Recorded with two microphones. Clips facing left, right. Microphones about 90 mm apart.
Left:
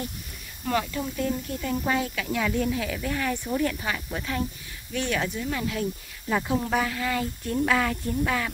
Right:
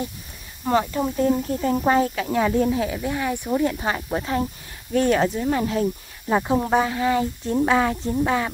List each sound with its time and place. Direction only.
0.7 s speech: 30° right (ahead or behind)
3.8 s speech: 35° right (ahead or behind)